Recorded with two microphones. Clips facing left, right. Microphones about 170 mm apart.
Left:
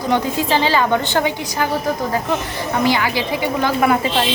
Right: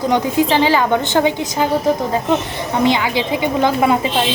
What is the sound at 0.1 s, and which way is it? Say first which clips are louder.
Speech: right 1 dB; 15° right (ahead or behind).